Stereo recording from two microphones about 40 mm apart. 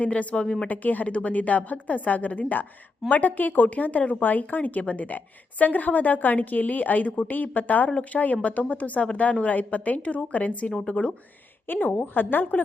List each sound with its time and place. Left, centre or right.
0.0 s a woman's voice: left
0.4 s speech: centre
0.7 s a woman's voice: left
11.7 s a woman's voice: left